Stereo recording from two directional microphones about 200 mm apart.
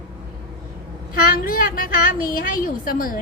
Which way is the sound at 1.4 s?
45° left (ahead or behind).